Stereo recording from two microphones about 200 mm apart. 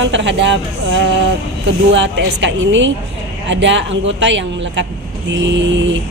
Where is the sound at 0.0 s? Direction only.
65° right (ahead or behind).